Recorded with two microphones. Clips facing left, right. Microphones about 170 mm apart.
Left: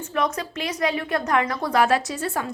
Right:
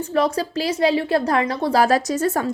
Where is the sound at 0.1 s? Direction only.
30° right (ahead or behind).